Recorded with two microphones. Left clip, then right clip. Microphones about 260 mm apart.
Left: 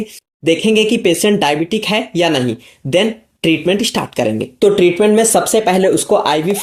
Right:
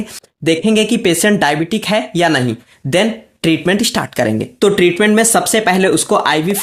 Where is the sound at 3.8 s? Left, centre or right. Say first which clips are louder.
Right 1 dB; right.